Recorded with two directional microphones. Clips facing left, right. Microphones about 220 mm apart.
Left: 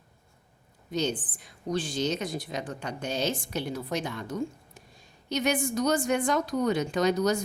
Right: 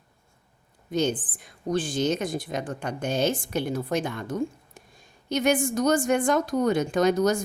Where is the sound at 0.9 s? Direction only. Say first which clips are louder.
Right 4 dB; 50° right (ahead or behind).